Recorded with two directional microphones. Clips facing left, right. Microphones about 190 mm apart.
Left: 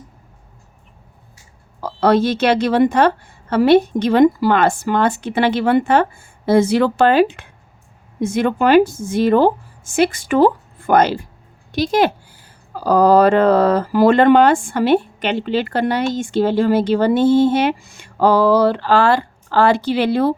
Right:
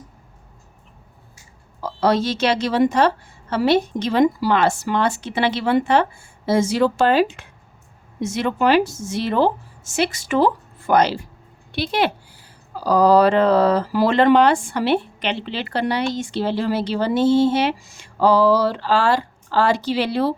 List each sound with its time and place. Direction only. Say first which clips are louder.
1.8 s a woman's voice: left 4 dB; 55° left (ahead or behind)